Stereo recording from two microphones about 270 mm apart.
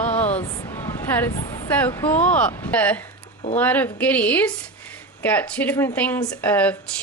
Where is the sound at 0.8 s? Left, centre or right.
Centre.